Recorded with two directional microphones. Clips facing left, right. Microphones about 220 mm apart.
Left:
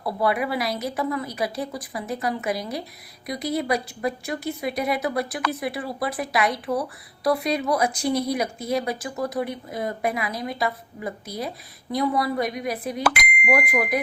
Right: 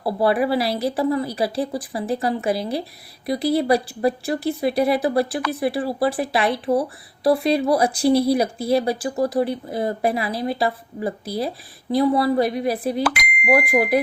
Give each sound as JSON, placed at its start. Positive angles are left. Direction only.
{"t": 0.0, "sound": "speech", "side_deg": -30}